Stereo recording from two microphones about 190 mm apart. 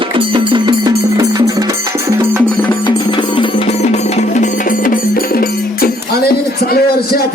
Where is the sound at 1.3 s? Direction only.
20° right (ahead or behind).